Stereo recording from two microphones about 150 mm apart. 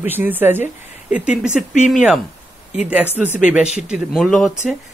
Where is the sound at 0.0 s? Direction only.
10° right (ahead or behind).